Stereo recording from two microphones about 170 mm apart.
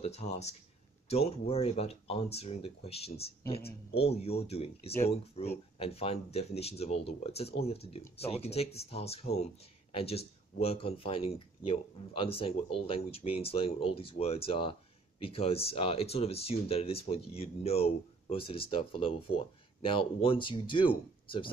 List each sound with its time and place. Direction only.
0.0 s speech: 40° left (ahead or behind)